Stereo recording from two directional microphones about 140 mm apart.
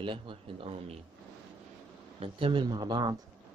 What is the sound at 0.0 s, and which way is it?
Speech, 35° right (ahead or behind).